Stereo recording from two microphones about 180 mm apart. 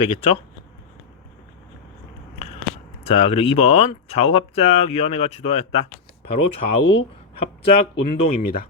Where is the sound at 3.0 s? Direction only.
35° left (ahead or behind).